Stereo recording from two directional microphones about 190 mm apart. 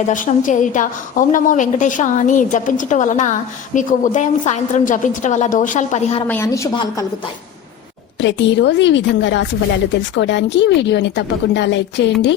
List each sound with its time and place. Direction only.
0.1 s a woman's voice: 40° left (ahead or behind)
6.2 s speech: 10° left (ahead or behind)
8.2 s a woman's voice: 70° left (ahead or behind)